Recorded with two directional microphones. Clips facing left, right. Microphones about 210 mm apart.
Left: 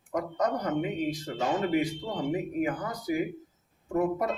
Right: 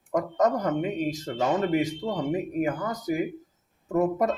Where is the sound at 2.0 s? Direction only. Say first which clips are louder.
Right 5 dB; 55° right (ahead or behind).